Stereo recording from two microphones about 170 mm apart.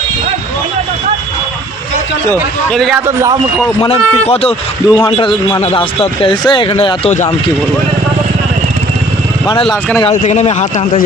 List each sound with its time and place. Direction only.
2.6 s a man's voice: centre (ahead or behind)
3.1 s speech: 15° right (ahead or behind)
3.8 s speech: 35° left (ahead or behind)
4.9 s a man's voice: 20° left (ahead or behind)
5.1 s speech: 30° left (ahead or behind)
10.1 s speech: 40° left (ahead or behind)